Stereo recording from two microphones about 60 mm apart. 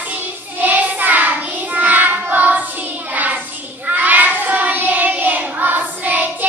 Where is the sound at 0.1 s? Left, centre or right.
Right.